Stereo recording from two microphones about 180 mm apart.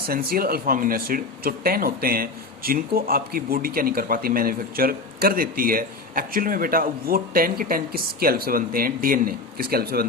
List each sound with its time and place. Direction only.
0.1 s speech: 55° right (ahead or behind)